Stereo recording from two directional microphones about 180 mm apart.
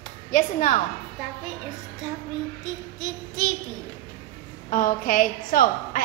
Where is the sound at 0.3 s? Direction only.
45° left (ahead or behind).